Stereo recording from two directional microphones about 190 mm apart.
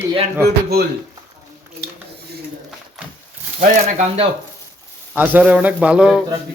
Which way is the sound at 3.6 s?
40° right (ahead or behind).